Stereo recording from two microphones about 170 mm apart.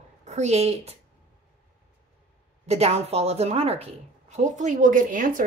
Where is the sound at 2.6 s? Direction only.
40° right (ahead or behind).